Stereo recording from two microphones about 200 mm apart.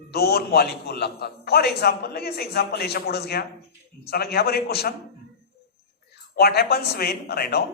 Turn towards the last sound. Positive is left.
turn(degrees=50)  # may be behind; listen again after turning